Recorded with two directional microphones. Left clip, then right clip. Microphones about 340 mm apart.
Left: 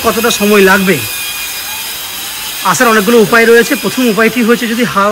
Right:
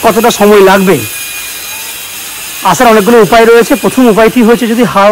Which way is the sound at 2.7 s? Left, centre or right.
Centre.